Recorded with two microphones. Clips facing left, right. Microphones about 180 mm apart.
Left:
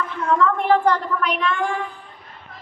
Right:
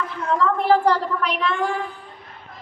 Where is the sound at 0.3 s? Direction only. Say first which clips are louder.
Even; 35° right (ahead or behind).